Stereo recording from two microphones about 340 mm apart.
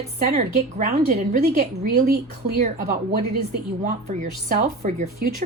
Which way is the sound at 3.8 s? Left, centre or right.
Right.